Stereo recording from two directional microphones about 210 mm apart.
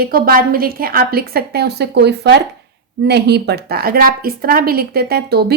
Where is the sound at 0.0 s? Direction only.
45° right (ahead or behind).